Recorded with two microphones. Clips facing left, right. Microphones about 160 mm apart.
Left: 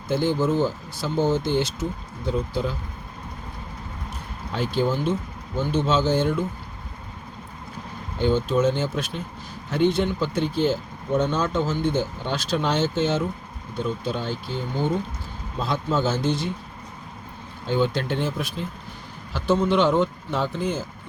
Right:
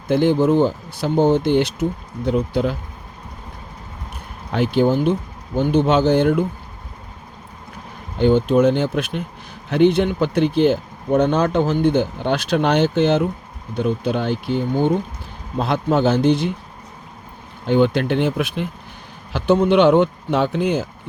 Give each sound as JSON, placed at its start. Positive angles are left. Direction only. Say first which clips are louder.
{"t": 0.1, "sound": "speech", "louder": "right 7 dB", "side_deg": -65}
{"t": 4.5, "sound": "speech", "louder": "right 7 dB", "side_deg": -65}
{"t": 8.2, "sound": "speech", "louder": "right 6 dB", "side_deg": -60}
{"t": 17.7, "sound": "speech", "louder": "right 7 dB", "side_deg": -65}